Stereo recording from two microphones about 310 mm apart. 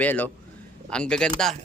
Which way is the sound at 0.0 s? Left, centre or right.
Centre.